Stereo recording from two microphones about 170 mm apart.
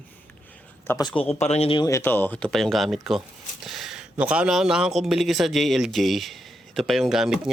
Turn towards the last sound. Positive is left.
turn(degrees=0)  # may be behind; listen again after turning